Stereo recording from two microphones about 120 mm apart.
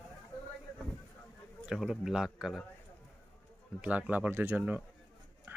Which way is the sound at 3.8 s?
10° right (ahead or behind).